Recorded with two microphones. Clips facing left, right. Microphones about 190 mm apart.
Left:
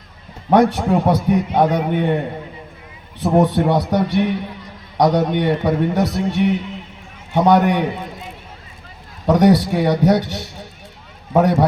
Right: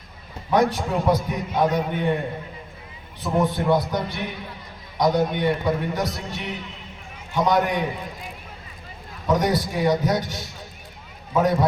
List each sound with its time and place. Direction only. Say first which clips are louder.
0.5 s a man's voice: left 6 dB; 60° left (ahead or behind)
3.2 s a man's voice: left 7 dB; 65° left (ahead or behind)
9.2 s a man's voice: left 8 dB; 65° left (ahead or behind)